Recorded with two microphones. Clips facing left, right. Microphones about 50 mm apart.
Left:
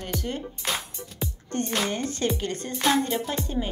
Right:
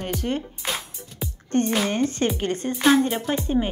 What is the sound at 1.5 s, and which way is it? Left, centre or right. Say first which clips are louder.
Speech: right 6 dB; right.